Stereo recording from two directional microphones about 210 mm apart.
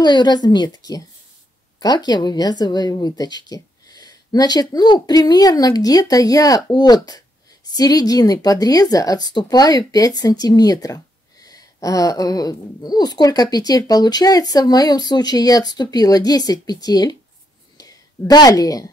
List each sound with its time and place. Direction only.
0.0 s a woman's voice: 20° left (ahead or behind)